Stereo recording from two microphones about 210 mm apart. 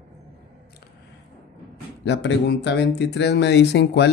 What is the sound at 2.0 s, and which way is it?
Speech, 55° left (ahead or behind).